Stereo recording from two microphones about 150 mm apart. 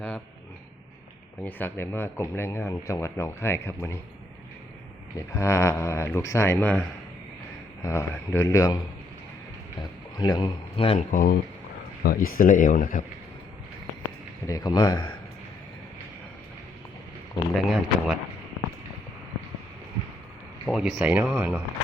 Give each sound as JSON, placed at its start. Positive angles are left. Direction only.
{"t": 1.5, "sound": "speech", "side_deg": 15}
{"t": 5.1, "sound": "speech", "side_deg": 20}
{"t": 7.9, "sound": "speech", "side_deg": 20}
{"t": 10.2, "sound": "a man's voice", "side_deg": 30}
{"t": 11.1, "sound": "speech", "side_deg": 75}
{"t": 14.4, "sound": "speech", "side_deg": 25}
{"t": 17.5, "sound": "speech", "side_deg": 0}
{"t": 20.7, "sound": "speech", "side_deg": -5}